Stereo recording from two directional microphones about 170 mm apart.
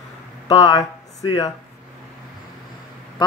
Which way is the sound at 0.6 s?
25° left (ahead or behind).